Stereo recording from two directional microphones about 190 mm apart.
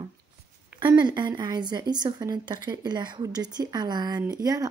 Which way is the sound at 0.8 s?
20° right (ahead or behind).